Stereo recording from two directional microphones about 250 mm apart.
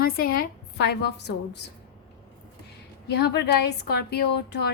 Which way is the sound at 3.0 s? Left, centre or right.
Left.